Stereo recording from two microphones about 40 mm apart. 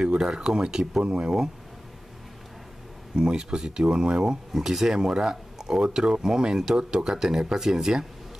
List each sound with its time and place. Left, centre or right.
0.0 s speech: right
3.2 s speech: right
4.5 s speech: centre